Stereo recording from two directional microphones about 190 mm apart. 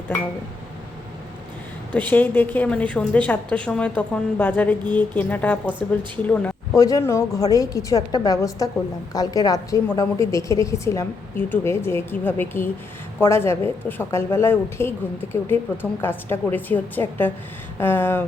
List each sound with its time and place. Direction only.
1.9 s a woman's voice: 10° left (ahead or behind)
6.7 s a woman's voice: 20° left (ahead or behind)